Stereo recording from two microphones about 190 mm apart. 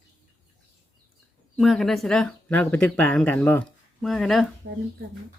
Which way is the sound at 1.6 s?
Centre (ahead or behind).